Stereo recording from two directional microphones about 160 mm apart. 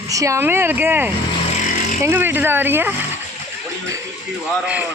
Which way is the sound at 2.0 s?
15° right (ahead or behind).